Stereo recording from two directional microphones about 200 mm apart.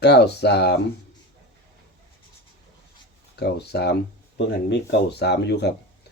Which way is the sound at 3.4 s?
55° left (ahead or behind).